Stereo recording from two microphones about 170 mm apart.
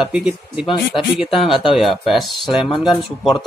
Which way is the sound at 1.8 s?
Centre (ahead or behind).